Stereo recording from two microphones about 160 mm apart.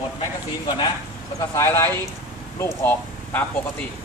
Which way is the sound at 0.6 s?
25° left (ahead or behind).